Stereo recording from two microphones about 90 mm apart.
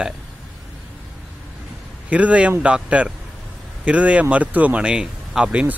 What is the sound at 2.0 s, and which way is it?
Speech, 15° right (ahead or behind).